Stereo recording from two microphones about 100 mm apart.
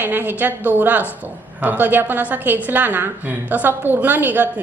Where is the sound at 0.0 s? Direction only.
20° right (ahead or behind).